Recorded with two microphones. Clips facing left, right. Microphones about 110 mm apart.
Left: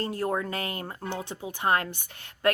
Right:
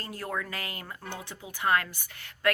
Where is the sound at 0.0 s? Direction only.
25° left (ahead or behind).